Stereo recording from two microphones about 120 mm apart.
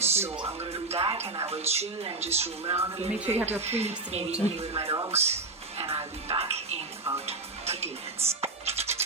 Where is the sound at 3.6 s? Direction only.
60° right (ahead or behind).